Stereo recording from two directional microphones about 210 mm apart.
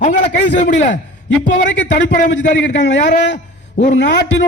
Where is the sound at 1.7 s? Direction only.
60° left (ahead or behind).